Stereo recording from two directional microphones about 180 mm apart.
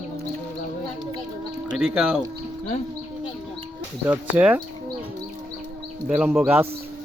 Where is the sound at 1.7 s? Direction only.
5° right (ahead or behind).